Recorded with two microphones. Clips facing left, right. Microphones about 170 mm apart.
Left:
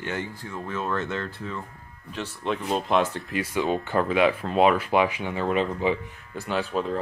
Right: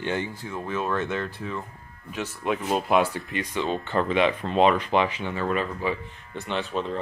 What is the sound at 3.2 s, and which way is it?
Speech, 5° left (ahead or behind).